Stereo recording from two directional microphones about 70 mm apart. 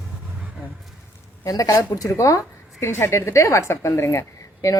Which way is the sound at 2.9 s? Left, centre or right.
Left.